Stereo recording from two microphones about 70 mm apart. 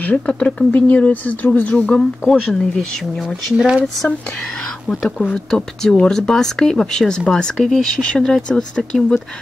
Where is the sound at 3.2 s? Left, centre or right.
Centre.